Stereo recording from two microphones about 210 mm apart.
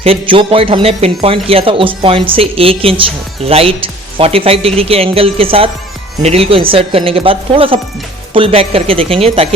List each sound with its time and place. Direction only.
0.0 s speech: 25° right (ahead or behind)